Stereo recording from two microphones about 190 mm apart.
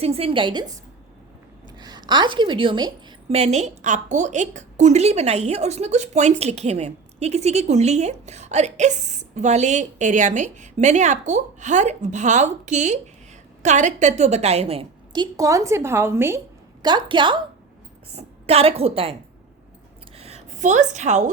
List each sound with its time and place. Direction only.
0.0 s a woman's voice: 30° right (ahead or behind)
1.8 s a woman's voice: 20° right (ahead or behind)
16.8 s a woman's voice: 25° right (ahead or behind)
20.1 s a sound: 35° right (ahead or behind)